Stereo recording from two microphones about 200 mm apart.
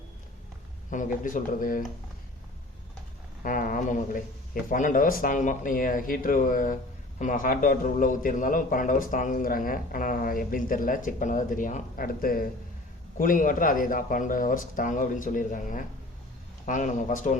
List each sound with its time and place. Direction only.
0.9 s speech: 40° left (ahead or behind)
3.4 s a man's voice: 40° left (ahead or behind)